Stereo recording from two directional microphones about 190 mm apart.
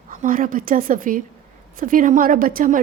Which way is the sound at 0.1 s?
45° right (ahead or behind).